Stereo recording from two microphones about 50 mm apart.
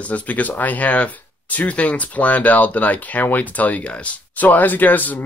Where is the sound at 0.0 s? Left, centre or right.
Left.